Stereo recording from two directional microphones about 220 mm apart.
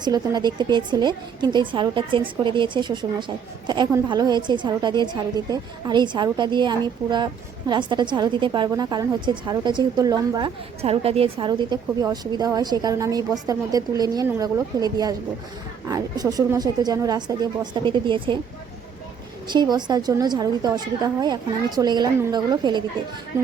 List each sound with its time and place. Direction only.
0.0 s a woman's voice: 20° right (ahead or behind)
10.8 s a woman's voice: 25° right (ahead or behind)
19.5 s a woman's voice: 20° right (ahead or behind)